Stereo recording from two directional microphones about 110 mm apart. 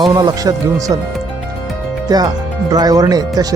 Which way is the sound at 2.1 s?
35° right (ahead or behind).